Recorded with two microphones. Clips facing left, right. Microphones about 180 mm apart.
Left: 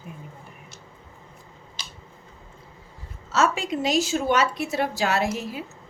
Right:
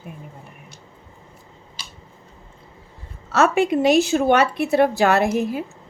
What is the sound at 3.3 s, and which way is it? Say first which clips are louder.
A woman's voice: right 6 dB; 60° right (ahead or behind).